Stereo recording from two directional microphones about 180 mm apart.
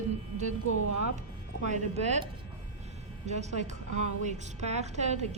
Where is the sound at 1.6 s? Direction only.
40° right (ahead or behind).